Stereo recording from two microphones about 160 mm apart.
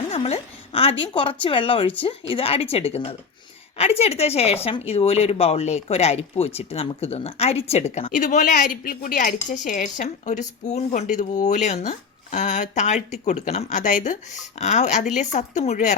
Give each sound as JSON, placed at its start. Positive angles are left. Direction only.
{"t": 0.1, "sound": "speech", "side_deg": 40}